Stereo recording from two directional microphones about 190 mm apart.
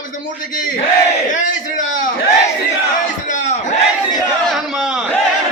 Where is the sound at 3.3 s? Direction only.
40° left (ahead or behind).